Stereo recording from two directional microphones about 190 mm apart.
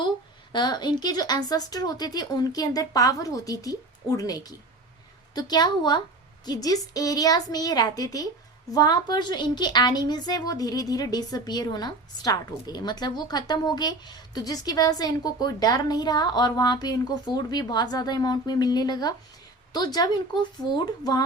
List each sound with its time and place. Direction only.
0.5 s a woman's voice: 20° left (ahead or behind)